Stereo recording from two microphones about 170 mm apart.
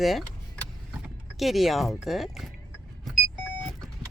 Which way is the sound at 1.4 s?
Centre (ahead or behind).